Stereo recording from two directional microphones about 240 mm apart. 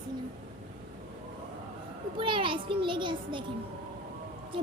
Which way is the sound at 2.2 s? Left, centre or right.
Right.